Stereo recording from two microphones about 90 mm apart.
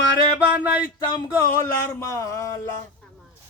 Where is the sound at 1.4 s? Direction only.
30° left (ahead or behind).